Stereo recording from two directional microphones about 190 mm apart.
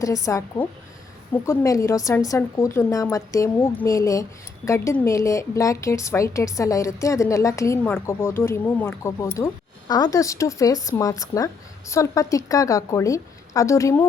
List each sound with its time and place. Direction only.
0.0 s a woman's voice: 15° left (ahead or behind)